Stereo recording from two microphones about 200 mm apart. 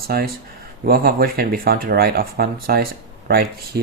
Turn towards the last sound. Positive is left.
turn(degrees=-50)  # may be behind; listen again after turning